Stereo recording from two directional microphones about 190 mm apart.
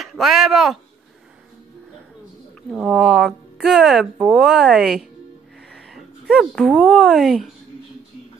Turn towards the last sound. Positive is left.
turn(degrees=0)  # may be behind; listen again after turning